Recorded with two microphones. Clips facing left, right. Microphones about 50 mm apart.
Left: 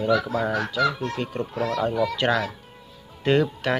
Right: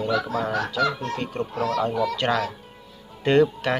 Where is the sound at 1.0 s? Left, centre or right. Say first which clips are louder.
Even; centre.